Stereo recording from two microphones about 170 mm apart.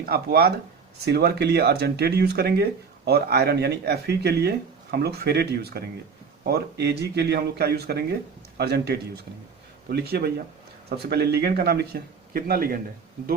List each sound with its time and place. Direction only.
0.0 s speech: 65° right (ahead or behind)